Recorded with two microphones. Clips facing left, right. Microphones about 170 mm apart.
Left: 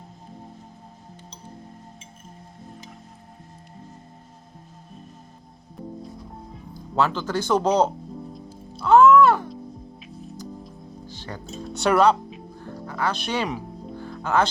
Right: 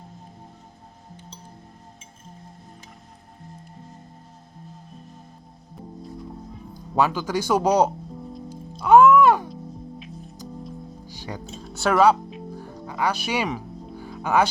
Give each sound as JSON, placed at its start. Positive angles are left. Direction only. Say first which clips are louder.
{"t": 6.9, "sound": "speech", "louder": "right 1 dB", "side_deg": -10}
{"t": 8.8, "sound": "music", "louder": "even", "side_deg": -15}
{"t": 11.1, "sound": "music", "louder": "right 2 dB", "side_deg": -15}
{"t": 11.6, "sound": "music", "louder": "even", "side_deg": 0}
{"t": 13.1, "sound": "speech", "louder": "right 1 dB", "side_deg": -10}
{"t": 14.0, "sound": "music", "louder": "right 1 dB", "side_deg": -10}